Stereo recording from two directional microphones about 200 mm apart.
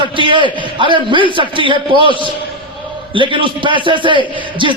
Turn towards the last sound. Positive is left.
turn(degrees=-25)  # may be behind; listen again after turning